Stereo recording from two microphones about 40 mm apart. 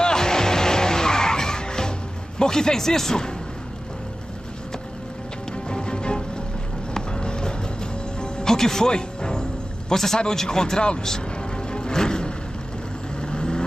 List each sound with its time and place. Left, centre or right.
0.0 s vehicle: centre
5.7 s music: left
9.8 s a man's voice: centre
11.1 s music: centre
13.2 s vehicle: left